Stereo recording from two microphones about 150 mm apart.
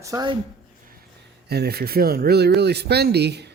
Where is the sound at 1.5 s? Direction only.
90° right.